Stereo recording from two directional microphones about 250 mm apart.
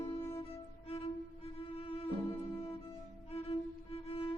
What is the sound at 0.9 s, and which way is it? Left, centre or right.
Music, left.